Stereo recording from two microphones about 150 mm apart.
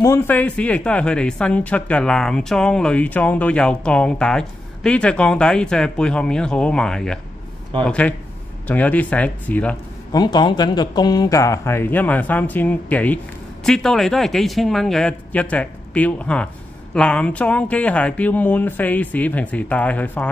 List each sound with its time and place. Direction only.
0.0 s speech: 15° left (ahead or behind)
10.1 s speech: 30° left (ahead or behind); by 20.2 s 10° left (ahead or behind)